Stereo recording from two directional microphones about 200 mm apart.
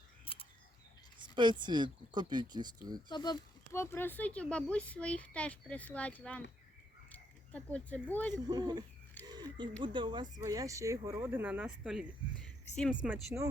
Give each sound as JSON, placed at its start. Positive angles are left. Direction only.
{"t": 0.3, "sound": "a sound", "side_deg": 25}
{"t": 1.2, "sound": "speech", "side_deg": -20}
{"t": 3.1, "sound": "speech", "side_deg": 20}
{"t": 8.3, "sound": "speech", "side_deg": -20}
{"t": 9.2, "sound": "a sound", "side_deg": -20}
{"t": 9.8, "sound": "speech", "side_deg": -25}